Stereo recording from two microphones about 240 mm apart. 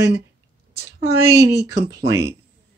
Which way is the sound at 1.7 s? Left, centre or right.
Right.